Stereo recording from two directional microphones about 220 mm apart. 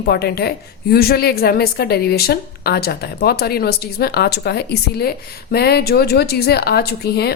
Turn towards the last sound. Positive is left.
turn(degrees=45)  # may be behind; listen again after turning